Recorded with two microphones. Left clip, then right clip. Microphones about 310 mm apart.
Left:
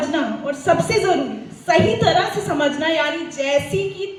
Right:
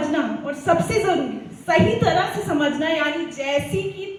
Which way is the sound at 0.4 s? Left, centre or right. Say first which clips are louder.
Left 3 dB; left.